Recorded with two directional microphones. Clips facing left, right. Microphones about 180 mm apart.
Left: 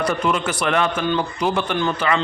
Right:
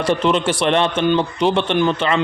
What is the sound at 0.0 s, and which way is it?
A man's voice, 25° right (ahead or behind).